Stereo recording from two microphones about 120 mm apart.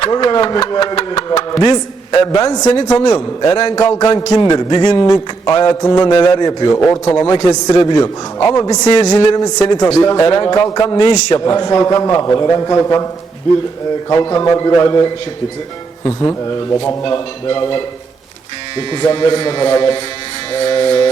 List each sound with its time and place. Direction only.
0.0 s a man's voice: 40° left (ahead or behind)
6.1 s a man's voice: 40° left (ahead or behind)
6.7 s a man's voice: 25° left (ahead or behind)
14.1 s a man's voice: 30° left (ahead or behind)
16.5 s a man's voice: 35° left (ahead or behind)